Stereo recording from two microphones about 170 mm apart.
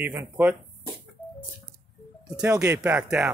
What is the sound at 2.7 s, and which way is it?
Speech, 10° right (ahead or behind).